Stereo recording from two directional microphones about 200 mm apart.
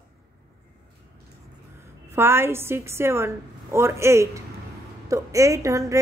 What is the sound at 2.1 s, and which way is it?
A woman's voice, 10° right (ahead or behind).